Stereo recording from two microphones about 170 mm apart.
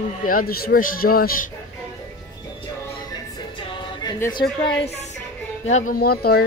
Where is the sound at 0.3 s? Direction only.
60° left (ahead or behind).